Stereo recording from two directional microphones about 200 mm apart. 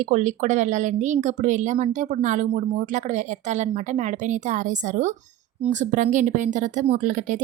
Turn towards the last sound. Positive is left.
turn(degrees=-40)  # may be behind; listen again after turning